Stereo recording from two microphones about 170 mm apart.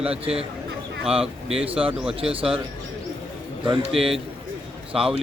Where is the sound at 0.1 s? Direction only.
35° right (ahead or behind).